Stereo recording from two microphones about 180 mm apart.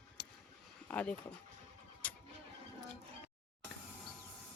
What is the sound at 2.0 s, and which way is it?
Vehicle, 10° left (ahead or behind).